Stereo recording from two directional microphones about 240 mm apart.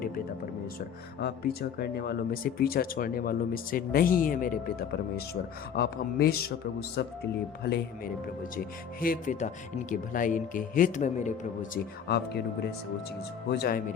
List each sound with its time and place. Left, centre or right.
1.8 s speech: left
12.0 s speech: left
13.5 s speech: left